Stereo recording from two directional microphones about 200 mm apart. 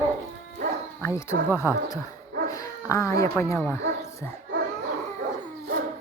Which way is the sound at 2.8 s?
15° left (ahead or behind).